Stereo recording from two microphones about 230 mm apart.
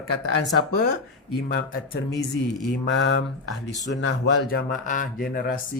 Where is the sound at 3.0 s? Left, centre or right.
Left.